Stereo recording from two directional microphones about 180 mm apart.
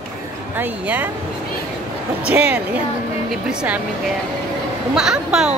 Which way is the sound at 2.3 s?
10° right (ahead or behind).